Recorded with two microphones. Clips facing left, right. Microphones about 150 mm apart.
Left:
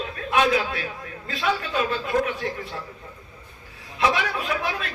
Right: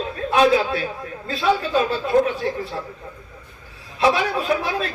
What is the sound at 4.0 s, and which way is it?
Speech, 30° right (ahead or behind).